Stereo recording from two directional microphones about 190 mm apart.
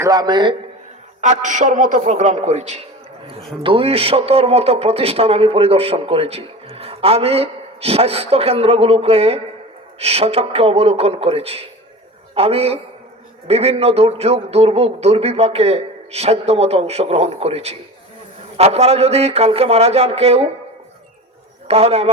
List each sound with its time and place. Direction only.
0.0 s a man's voice: 20° right (ahead or behind)
1.2 s a man's voice: 40° right (ahead or behind)
21.7 s a man's voice: 30° right (ahead or behind)